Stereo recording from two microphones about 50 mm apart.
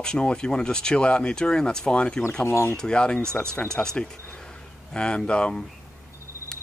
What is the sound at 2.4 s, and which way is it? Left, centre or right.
Speech, left.